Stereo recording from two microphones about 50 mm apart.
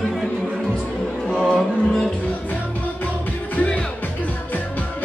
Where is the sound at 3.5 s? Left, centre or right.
Left.